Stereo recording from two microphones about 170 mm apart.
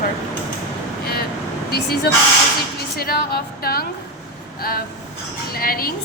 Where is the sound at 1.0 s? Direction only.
65° left (ahead or behind).